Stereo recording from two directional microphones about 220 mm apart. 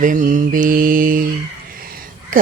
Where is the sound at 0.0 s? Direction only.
35° right (ahead or behind).